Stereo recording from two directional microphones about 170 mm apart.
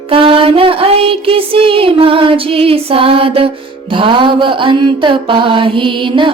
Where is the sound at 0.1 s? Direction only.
35° right (ahead or behind).